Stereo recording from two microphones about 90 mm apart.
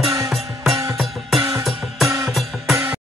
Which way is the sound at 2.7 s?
25° right (ahead or behind).